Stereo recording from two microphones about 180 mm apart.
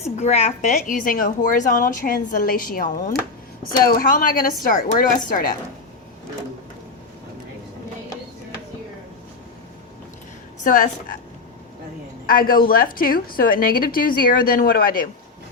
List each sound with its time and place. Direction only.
0.0 s a woman's voice: 35° left (ahead or behind)
10.6 s a woman's voice: 45° left (ahead or behind)
12.2 s a woman's voice: 55° left (ahead or behind)